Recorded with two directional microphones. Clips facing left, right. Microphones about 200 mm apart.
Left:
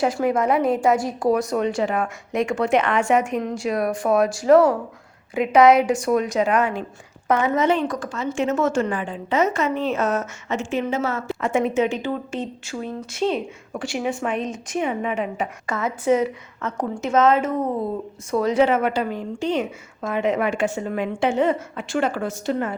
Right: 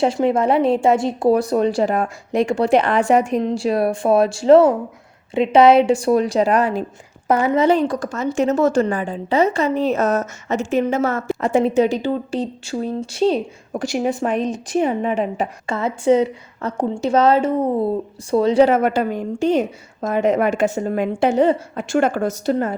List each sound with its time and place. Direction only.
0.0 s a woman's voice: 25° right (ahead or behind); by 11.4 s 50° right (ahead or behind)
11.4 s a woman's voice: 35° right (ahead or behind)
21.8 s a woman's voice: 50° right (ahead or behind)